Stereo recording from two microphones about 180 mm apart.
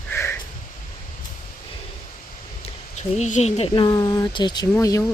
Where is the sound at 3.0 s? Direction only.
40° left (ahead or behind); by 5.0 s 20° left (ahead or behind).